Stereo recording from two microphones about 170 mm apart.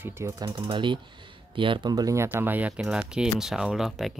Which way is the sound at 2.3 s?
10° right (ahead or behind).